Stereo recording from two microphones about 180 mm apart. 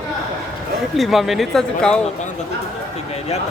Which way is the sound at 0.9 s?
Centre (ahead or behind).